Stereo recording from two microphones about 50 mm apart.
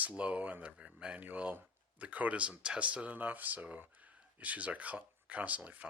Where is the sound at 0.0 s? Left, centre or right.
Right.